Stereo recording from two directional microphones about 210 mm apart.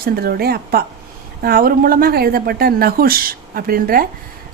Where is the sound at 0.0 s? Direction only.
45° right (ahead or behind).